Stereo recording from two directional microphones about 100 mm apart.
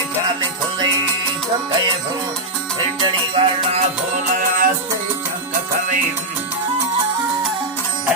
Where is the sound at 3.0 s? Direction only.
55° right (ahead or behind).